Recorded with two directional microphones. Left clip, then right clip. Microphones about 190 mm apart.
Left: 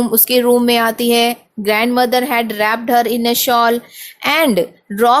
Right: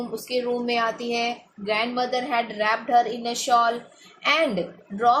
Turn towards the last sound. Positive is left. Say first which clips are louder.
# left 8 dB
turn(degrees=55)  # may be behind; listen again after turning